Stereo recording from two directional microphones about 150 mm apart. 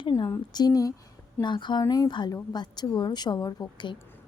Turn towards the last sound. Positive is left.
turn(degrees=30)  # may be behind; listen again after turning